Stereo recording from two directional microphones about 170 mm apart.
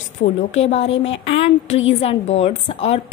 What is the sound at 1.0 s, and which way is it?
A woman's voice, 35° left (ahead or behind).